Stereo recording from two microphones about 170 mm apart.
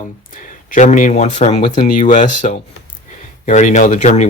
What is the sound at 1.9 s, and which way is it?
Speech, 50° left (ahead or behind).